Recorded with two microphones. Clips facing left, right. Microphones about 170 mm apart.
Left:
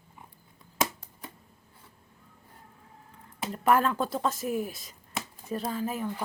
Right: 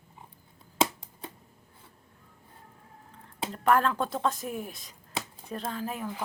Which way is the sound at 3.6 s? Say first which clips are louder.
Even; 5° left (ahead or behind).